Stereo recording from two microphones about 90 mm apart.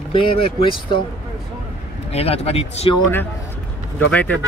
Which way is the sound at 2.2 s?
90° left.